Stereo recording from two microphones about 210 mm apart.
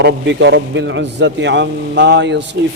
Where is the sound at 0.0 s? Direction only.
55° right (ahead or behind).